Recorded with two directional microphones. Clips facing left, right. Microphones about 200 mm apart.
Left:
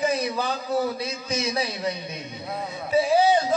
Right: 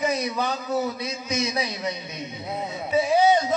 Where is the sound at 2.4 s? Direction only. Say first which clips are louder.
Right 1 dB; 20° right (ahead or behind).